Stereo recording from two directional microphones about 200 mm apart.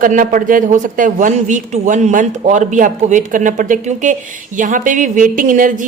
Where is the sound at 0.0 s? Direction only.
40° right (ahead or behind).